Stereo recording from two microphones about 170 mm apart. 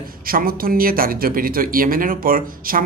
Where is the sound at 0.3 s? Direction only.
60° right (ahead or behind).